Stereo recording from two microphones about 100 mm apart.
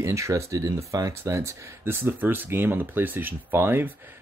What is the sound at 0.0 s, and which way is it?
Speech, 30° right (ahead or behind).